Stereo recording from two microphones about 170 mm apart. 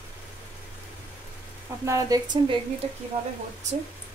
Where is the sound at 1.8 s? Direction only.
20° right (ahead or behind).